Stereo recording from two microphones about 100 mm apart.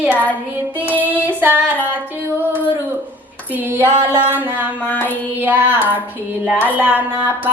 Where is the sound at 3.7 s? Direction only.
20° right (ahead or behind).